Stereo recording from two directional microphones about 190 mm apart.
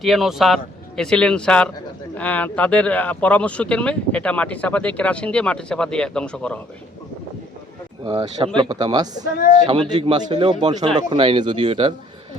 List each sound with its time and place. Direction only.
0.0 s speech: centre (ahead or behind)
8.0 s speech: 20° right (ahead or behind)